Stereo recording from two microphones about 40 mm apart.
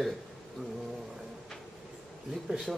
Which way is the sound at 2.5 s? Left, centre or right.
Right.